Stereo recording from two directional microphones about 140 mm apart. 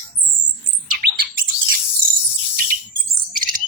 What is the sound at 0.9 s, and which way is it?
Bird, 90° right.